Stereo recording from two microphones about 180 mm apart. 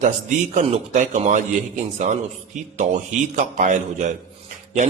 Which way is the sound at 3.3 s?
45° right (ahead or behind).